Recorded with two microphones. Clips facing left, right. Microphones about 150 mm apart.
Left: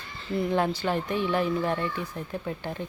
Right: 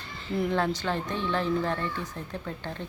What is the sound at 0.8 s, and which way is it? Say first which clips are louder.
Speech: left 3 dB; 10° left (ahead or behind).